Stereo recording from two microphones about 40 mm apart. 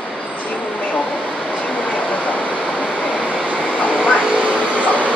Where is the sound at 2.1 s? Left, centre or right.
Left.